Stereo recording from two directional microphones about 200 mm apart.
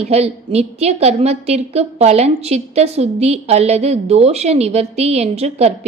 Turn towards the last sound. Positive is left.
turn(degrees=-30)  # may be behind; listen again after turning